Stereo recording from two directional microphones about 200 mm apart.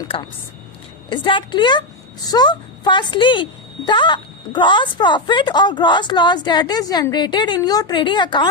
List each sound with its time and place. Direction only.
0.1 s speech: 25° left (ahead or behind)